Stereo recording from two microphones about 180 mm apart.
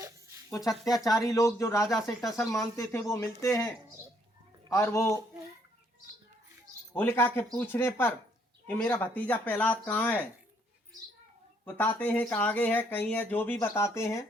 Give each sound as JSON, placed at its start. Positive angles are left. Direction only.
{"t": 1.0, "sound": "speech", "side_deg": 20}
{"t": 6.9, "sound": "speech", "side_deg": 15}
{"t": 11.6, "sound": "speech", "side_deg": 10}